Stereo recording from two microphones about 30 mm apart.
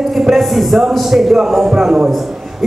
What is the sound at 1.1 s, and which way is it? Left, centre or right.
Speech, centre.